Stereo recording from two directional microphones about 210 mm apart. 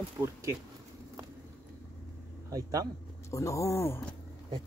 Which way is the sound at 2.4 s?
15° right (ahead or behind).